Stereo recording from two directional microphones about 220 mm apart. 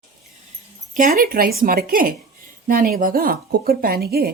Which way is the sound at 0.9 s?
40° right (ahead or behind).